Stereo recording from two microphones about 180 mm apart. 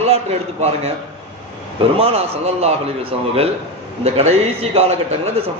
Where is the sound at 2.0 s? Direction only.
35° right (ahead or behind).